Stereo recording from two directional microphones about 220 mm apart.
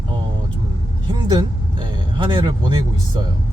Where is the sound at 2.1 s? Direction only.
20° right (ahead or behind).